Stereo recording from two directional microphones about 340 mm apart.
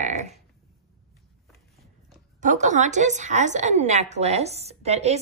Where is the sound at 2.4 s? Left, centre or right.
Right.